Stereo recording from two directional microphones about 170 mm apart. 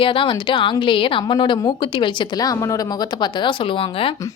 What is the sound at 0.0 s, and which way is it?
A woman's voice, 30° left (ahead or behind).